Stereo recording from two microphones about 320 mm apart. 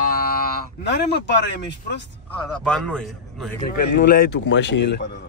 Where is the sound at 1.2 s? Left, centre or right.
Left.